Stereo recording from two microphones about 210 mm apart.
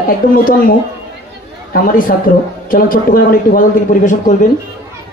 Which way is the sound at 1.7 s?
40° left (ahead or behind).